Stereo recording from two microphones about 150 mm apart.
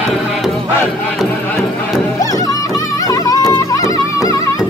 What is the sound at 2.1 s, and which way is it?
Music, 25° left (ahead or behind).